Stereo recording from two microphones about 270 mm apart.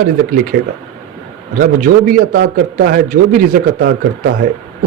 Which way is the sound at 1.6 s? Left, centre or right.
Right.